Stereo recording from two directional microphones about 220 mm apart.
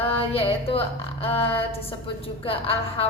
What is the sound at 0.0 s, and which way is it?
A woman's voice, 25° left (ahead or behind).